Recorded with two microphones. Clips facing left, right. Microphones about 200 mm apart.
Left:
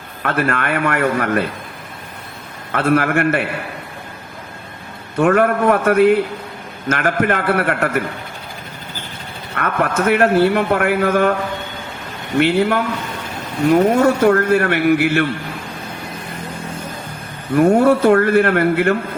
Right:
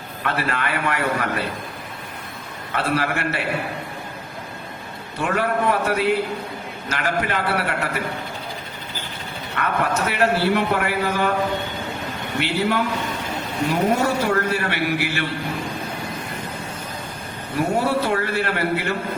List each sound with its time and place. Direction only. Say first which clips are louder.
0.2 s a man's voice: left 5 dB; 50° left (ahead or behind)
2.7 s a man's voice: left 7 dB; 50° left (ahead or behind)
5.2 s a man's voice: left 8 dB; 50° left (ahead or behind)
9.6 s a man's voice: left 4 dB; 50° left (ahead or behind)
12.4 s a man's voice: left 7 dB; 50° left (ahead or behind)
13.9 s a man's voice: left 7 dB; 50° left (ahead or behind)
17.5 s a man's voice: left 9 dB; 50° left (ahead or behind)